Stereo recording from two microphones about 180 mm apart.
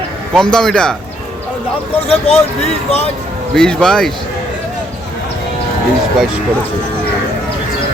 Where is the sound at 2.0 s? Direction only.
30° left (ahead or behind).